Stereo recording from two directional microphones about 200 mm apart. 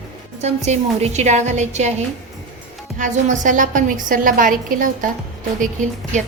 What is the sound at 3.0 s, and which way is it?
A woman's voice, 40° right (ahead or behind).